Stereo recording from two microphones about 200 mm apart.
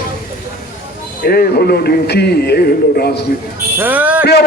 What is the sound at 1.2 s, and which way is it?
A man's voice, 50° left (ahead or behind).